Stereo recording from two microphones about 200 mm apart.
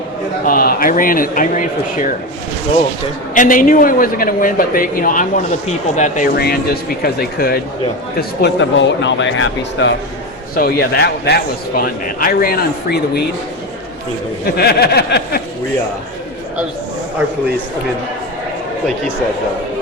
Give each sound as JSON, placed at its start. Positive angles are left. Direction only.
{"t": 0.4, "sound": "a man's voice", "side_deg": 45}
{"t": 3.3, "sound": "a man's voice", "side_deg": 40}
{"t": 8.4, "sound": "speech", "side_deg": 60}
{"t": 10.5, "sound": "a man's voice", "side_deg": 50}
{"t": 14.4, "sound": "a man's voice", "side_deg": 50}